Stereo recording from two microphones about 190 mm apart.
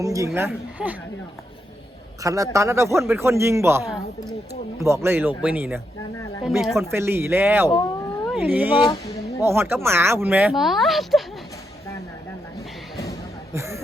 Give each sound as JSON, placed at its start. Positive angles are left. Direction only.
{"t": 0.0, "sound": "speech", "side_deg": -15}
{"t": 2.2, "sound": "speech", "side_deg": -15}
{"t": 3.8, "sound": "speech", "side_deg": 0}
{"t": 5.0, "sound": "speech", "side_deg": -10}
{"t": 7.7, "sound": "cat", "side_deg": 15}
{"t": 8.3, "sound": "speech", "side_deg": -5}
{"t": 13.5, "sound": "a sound", "side_deg": -15}